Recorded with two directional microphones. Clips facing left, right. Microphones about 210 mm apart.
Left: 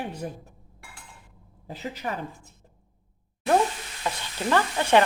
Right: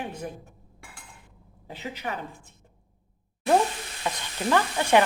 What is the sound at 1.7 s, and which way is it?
Speech, 40° left (ahead or behind).